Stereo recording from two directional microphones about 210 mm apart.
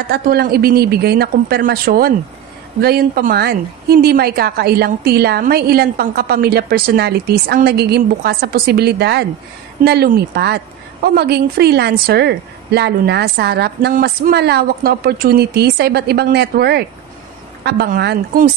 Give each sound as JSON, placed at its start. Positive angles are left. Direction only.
{"t": 0.1, "sound": "a woman's voice", "side_deg": -45}